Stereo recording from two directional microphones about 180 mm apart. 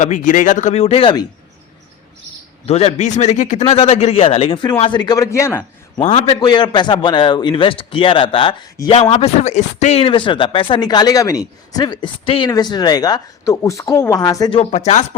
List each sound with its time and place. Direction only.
0.0 s a man's voice: 45° left (ahead or behind)
2.6 s a man's voice: 35° left (ahead or behind); by 5.6 s 15° left (ahead or behind)
6.0 s a man's voice: 30° left (ahead or behind)
14.6 s a man's voice: 35° left (ahead or behind)